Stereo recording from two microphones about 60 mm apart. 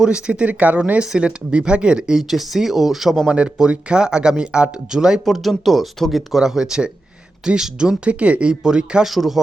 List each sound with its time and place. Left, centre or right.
0.0 s speech: centre
1.0 s speech: centre
3.2 s speech: centre